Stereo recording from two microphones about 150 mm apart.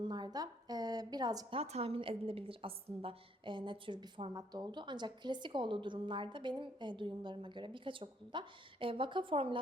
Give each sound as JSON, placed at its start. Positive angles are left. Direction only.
{"t": 0.0, "sound": "a woman's voice", "side_deg": -30}
{"t": 1.5, "sound": "a woman's voice", "side_deg": -40}